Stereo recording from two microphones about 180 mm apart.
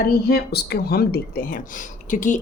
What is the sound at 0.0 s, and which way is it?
Speech, 60° left (ahead or behind).